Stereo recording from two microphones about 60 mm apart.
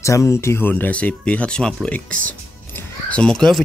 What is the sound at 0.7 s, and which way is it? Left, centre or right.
Speech, left.